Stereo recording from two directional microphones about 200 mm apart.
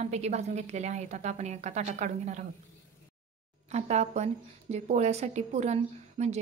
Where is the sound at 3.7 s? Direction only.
35° right (ahead or behind).